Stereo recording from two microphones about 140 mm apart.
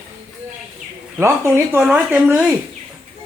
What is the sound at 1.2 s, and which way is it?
Speech, 15° right (ahead or behind).